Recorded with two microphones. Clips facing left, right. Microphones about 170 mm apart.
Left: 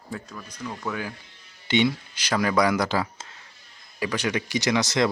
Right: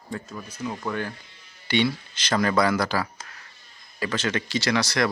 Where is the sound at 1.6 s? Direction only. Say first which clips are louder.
Left 1 dB; 20° left (ahead or behind).